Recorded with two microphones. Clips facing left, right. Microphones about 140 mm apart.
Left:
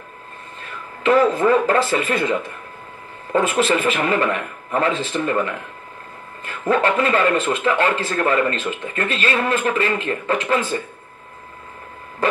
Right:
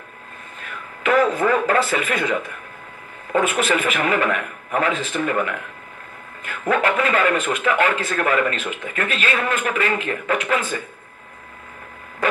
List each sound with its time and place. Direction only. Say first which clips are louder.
0.6 s speech: left 1 dB; 30° left (ahead or behind)
6.7 s speech: left 2 dB; 30° left (ahead or behind)